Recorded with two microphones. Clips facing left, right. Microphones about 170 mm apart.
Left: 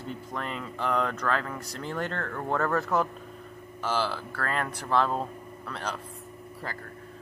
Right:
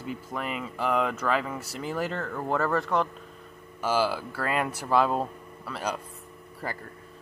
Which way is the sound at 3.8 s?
10° right (ahead or behind).